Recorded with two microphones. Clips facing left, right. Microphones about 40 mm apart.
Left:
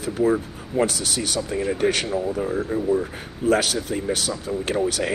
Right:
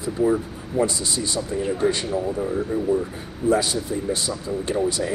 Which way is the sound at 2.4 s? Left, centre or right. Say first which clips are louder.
Even; centre.